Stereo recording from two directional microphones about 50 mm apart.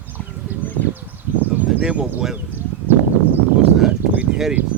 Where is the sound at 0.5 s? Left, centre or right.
Right.